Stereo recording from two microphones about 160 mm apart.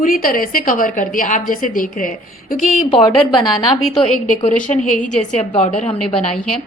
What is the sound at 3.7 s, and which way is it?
Speech, centre (ahead or behind).